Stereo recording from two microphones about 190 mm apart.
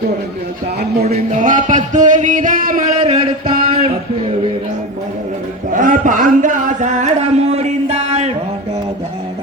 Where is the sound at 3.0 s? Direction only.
25° right (ahead or behind).